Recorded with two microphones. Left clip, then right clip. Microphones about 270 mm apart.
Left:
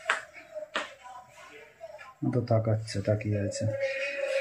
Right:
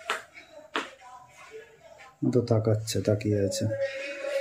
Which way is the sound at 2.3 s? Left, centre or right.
Centre.